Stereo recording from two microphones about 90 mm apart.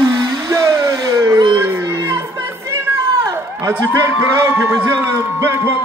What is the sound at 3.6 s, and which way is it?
A man's voice, 35° right (ahead or behind).